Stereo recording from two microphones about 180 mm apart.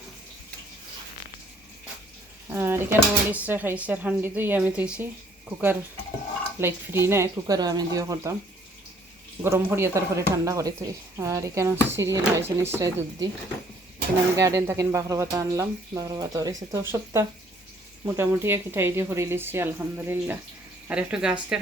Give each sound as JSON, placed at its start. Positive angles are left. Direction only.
{"t": 2.5, "sound": "speech", "side_deg": -10}
{"t": 9.4, "sound": "speech", "side_deg": -15}
{"t": 14.3, "sound": "speech", "side_deg": -15}